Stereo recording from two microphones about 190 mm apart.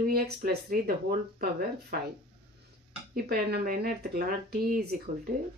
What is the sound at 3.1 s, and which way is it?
Speech, 50° right (ahead or behind).